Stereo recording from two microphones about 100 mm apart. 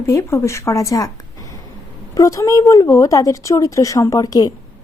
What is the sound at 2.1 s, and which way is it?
Speech, 30° left (ahead or behind).